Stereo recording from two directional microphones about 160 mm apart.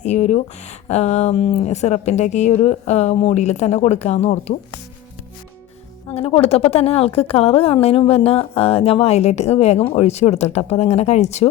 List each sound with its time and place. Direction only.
0.0 s speech: 45° left (ahead or behind)
6.1 s a woman's voice: 35° left (ahead or behind)